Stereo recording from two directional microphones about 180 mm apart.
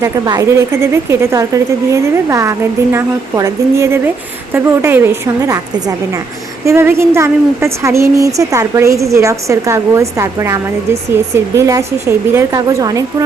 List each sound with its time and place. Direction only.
0.0 s speech: 20° right (ahead or behind)
6.7 s a woman's voice: 15° right (ahead or behind)